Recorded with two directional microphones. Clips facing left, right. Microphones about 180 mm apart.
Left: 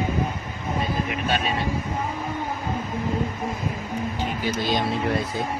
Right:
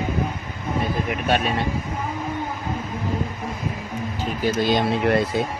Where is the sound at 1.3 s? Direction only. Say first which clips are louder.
Right 5 dB; 60° right (ahead or behind).